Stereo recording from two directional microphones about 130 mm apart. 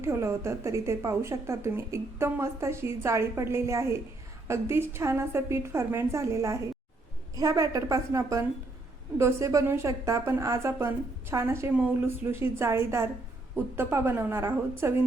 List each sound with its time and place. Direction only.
0.0 s a woman's voice: 20° right (ahead or behind)